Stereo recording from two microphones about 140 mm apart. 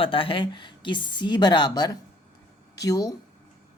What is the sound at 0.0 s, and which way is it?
Speech, 40° left (ahead or behind).